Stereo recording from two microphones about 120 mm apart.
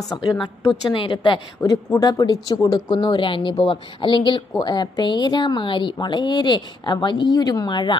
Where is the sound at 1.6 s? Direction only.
30° left (ahead or behind).